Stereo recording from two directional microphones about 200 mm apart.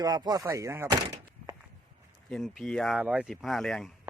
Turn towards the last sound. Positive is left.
turn(degrees=0)  # may be behind; listen again after turning